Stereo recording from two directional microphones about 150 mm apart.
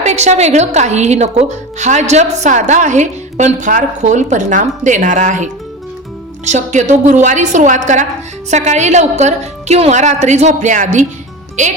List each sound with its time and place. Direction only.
0.0 s a woman's voice: 50° right (ahead or behind)